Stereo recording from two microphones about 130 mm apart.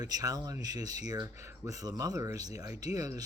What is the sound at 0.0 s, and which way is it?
Speech, 30° right (ahead or behind).